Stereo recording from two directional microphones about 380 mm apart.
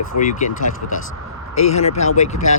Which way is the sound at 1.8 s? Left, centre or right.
Centre.